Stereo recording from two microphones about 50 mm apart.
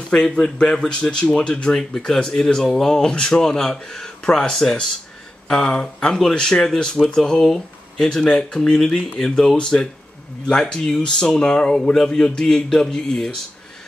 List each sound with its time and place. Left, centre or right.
0.1 s speech: left